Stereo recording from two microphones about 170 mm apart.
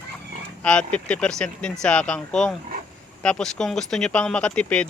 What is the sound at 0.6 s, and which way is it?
Speech, 5° left (ahead or behind).